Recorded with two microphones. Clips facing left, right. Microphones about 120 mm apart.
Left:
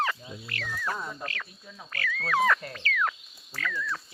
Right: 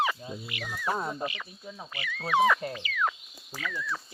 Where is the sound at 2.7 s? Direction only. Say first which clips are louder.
Left 1 dB; 10° right (ahead or behind).